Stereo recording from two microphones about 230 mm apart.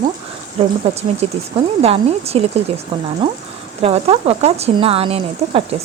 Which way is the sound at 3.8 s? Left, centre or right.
Right.